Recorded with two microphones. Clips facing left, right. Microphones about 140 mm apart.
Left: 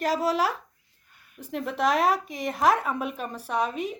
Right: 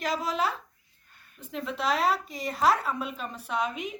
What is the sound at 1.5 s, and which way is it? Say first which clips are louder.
Speech: left 4 dB; 55° left (ahead or behind).